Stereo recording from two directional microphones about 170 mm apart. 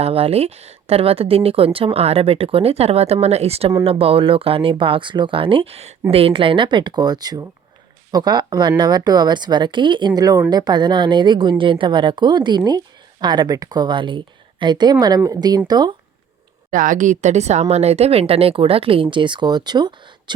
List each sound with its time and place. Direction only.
0.0 s a woman's voice: 35° right (ahead or behind)
16.7 s speech: 50° right (ahead or behind); by 20.3 s 25° right (ahead or behind)